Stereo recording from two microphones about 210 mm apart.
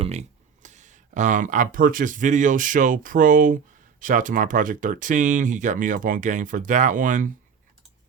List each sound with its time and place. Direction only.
0.0 s speech: 30° right (ahead or behind)